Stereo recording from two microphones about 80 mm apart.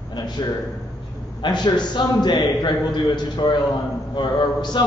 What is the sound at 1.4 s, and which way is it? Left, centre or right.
A man's voice, left.